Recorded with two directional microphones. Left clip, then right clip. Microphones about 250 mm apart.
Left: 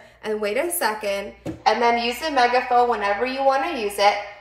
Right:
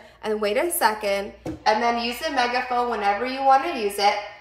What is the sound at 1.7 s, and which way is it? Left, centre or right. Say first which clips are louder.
A woman's voice: left 2 dB; left.